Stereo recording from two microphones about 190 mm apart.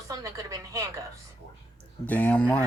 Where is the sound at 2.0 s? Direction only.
10° left (ahead or behind).